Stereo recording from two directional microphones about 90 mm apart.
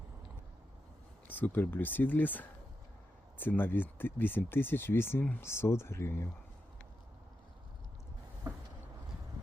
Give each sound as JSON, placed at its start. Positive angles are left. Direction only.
{"t": 1.3, "sound": "speech", "side_deg": 20}